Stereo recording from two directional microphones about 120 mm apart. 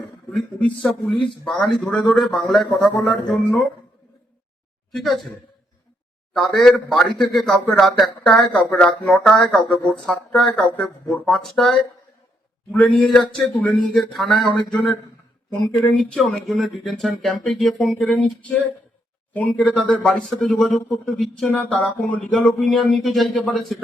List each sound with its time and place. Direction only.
0.3 s a man's voice: 5° left (ahead or behind)
1.1 s speech: 45° left (ahead or behind)
1.5 s a man's voice: 5° left (ahead or behind)
4.9 s a man's voice: centre (ahead or behind)
6.5 s a man's voice: 5° left (ahead or behind)